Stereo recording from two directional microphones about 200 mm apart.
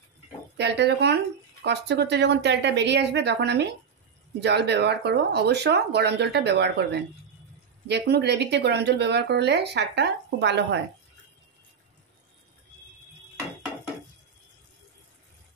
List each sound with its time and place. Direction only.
0.6 s speech: 55° right (ahead or behind)